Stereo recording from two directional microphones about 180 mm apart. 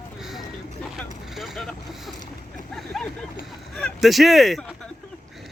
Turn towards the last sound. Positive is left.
turn(degrees=0)  # may be behind; listen again after turning